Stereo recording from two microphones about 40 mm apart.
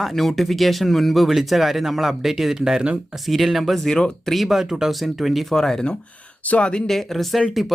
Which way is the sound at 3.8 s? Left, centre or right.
Centre.